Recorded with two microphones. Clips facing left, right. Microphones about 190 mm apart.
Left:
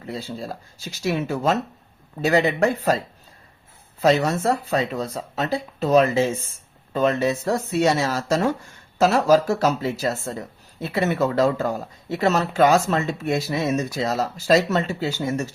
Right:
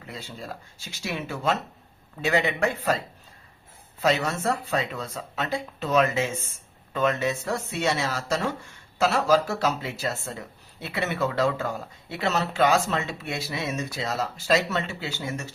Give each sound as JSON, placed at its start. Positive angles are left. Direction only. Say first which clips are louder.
{"t": 0.1, "sound": "speech", "louder": "left 7 dB", "side_deg": 35}
{"t": 4.0, "sound": "speech", "louder": "left 5 dB", "side_deg": 40}